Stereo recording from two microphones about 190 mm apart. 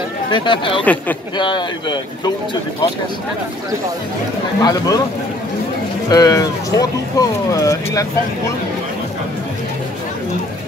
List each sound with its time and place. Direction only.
0.3 s speech: 25° left (ahead or behind)
4.6 s speech: 20° left (ahead or behind)
6.0 s speech: 20° left (ahead or behind)